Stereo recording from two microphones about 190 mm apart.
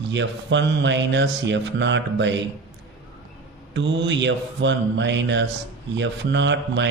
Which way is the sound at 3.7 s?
70° right (ahead or behind).